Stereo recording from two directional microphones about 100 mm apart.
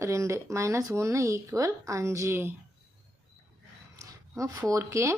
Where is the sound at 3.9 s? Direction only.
35° right (ahead or behind).